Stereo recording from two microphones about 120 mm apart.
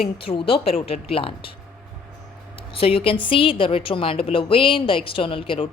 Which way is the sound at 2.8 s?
55° left (ahead or behind).